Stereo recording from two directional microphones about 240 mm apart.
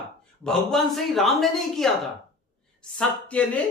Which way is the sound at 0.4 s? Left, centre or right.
Centre.